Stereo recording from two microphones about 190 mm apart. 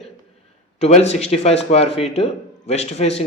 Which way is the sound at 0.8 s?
35° left (ahead or behind).